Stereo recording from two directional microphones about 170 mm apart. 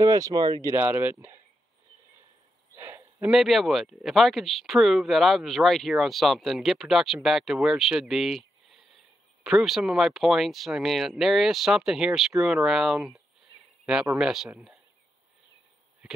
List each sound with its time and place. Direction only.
0.0 s speech: 20° right (ahead or behind)
2.7 s a sound: 15° right (ahead or behind)
3.3 s speech: centre (ahead or behind)